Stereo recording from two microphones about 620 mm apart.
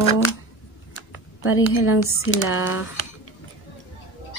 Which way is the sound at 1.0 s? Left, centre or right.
Centre.